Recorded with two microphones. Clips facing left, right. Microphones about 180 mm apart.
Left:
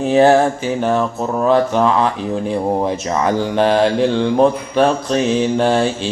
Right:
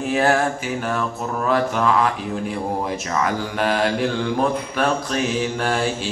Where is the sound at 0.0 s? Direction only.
30° left (ahead or behind).